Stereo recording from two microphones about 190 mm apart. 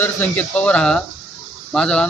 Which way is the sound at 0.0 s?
10° left (ahead or behind).